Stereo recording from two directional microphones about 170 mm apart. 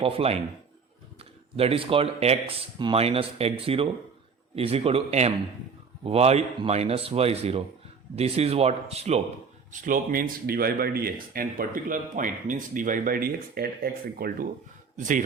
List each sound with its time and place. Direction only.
0.0 s speech: 35° right (ahead or behind)
9.7 s speech: 50° right (ahead or behind)
14.9 s speech: 50° right (ahead or behind)